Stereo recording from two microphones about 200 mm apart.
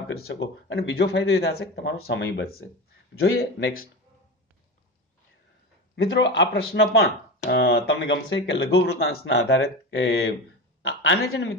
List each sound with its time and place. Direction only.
0.3 s speech: 60° left (ahead or behind)
6.0 s speech: 60° left (ahead or behind)
9.2 s speech: 65° left (ahead or behind)
10.8 s a sound: 80° left